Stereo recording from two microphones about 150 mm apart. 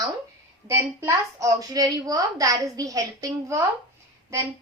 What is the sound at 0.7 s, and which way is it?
A woman's voice, 20° right (ahead or behind).